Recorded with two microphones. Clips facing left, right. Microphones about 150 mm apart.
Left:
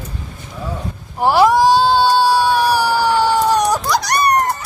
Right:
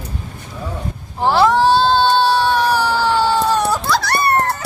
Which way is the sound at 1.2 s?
10° left (ahead or behind).